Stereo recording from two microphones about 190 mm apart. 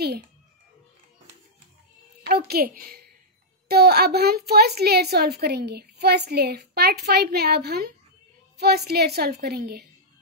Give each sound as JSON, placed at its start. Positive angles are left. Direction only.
{"t": 2.2, "sound": "a woman's voice", "side_deg": -55}